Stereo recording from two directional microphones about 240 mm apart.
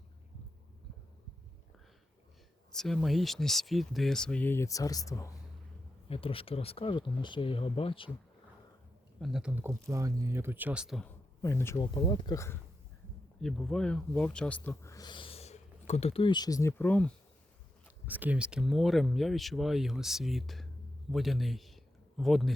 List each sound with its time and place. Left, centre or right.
2.7 s speech: centre; by 8.1 s left
9.2 s speech: centre
11.4 s speech: centre
13.4 s speech: centre
18.0 s speech: centre